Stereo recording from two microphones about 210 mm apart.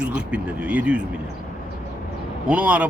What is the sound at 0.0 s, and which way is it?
A man's voice, 5° right (ahead or behind).